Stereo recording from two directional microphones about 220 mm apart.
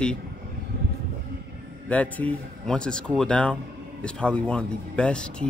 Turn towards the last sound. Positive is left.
turn(degrees=5)  # may be behind; listen again after turning